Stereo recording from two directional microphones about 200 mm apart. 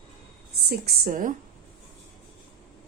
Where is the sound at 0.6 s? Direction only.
50° right (ahead or behind).